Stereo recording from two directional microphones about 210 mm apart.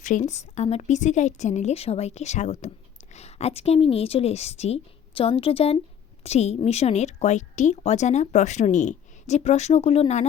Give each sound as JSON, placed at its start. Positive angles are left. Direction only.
{"t": 0.0, "sound": "a woman's voice", "side_deg": 35}